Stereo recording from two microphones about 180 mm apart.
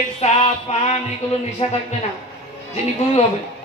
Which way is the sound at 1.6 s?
35° left (ahead or behind).